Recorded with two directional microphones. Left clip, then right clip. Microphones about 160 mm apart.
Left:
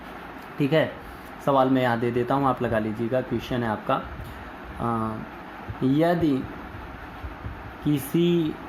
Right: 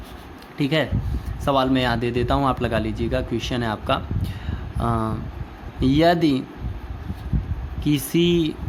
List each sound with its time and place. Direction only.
0.6 s speech: 40° right (ahead or behind)
4.8 s speech: 60° right (ahead or behind)
7.9 s speech: 45° right (ahead or behind)